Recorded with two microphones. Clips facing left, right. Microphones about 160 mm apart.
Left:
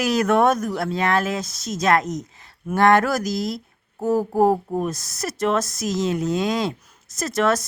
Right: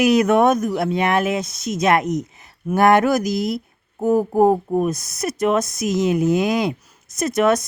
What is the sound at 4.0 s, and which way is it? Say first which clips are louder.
Speech: right 3 dB; 20° right (ahead or behind).